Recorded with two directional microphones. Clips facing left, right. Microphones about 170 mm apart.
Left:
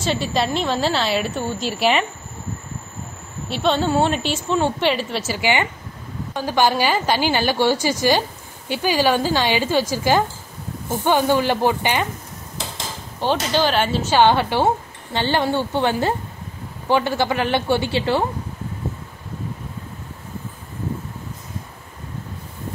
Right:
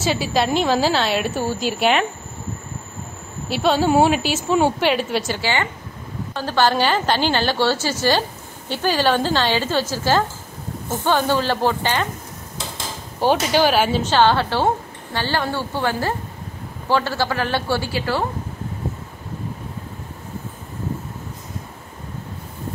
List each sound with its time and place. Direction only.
0.0 s a woman's voice: 5° right (ahead or behind)
3.4 s a woman's voice: 5° right (ahead or behind)
5.4 s a woman's voice: 15° left (ahead or behind)
13.2 s speech: 10° right (ahead or behind)
14.0 s a woman's voice: 15° left (ahead or behind)